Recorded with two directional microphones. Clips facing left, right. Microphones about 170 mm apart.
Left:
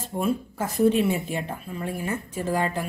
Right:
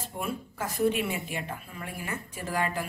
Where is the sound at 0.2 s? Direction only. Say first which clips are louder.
Left 8 dB; 25° left (ahead or behind).